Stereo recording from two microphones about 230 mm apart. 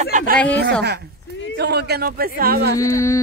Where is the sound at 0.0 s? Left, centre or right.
Right.